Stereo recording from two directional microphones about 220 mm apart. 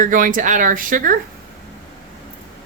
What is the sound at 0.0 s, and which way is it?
Speech, 35° right (ahead or behind).